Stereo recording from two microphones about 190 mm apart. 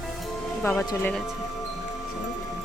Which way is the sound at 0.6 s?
10° left (ahead or behind).